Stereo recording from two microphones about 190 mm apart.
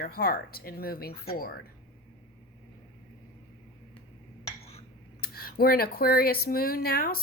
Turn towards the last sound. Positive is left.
turn(degrees=50)  # may be behind; listen again after turning